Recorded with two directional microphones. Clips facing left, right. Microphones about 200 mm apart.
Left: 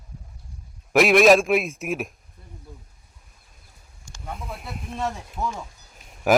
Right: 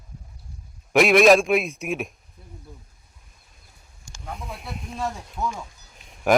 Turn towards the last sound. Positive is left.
turn(degrees=5)  # may be behind; listen again after turning